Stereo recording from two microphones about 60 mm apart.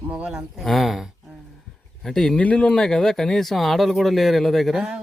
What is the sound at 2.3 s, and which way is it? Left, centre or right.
Speech, centre.